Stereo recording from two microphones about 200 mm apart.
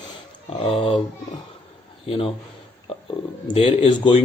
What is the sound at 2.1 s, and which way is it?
Speech, 30° left (ahead or behind).